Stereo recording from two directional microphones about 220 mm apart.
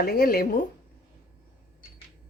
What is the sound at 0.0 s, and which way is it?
Speech, 45° left (ahead or behind).